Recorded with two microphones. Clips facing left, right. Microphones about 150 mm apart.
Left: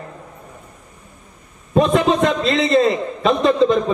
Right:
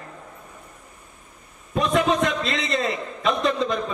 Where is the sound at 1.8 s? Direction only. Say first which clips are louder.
Left 5 dB; 25° left (ahead or behind).